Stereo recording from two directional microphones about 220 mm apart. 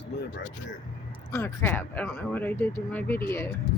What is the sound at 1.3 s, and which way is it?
Speech, 10° left (ahead or behind).